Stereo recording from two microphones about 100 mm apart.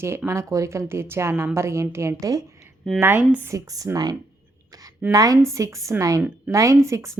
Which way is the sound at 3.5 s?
35° right (ahead or behind).